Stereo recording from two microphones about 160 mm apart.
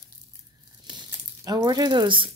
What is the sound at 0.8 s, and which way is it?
Crumpling, 25° right (ahead or behind).